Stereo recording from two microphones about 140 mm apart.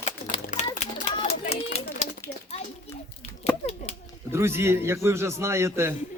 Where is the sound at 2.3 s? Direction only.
90° left.